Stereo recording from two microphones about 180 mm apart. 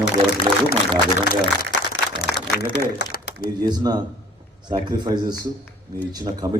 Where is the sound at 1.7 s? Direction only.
80° left.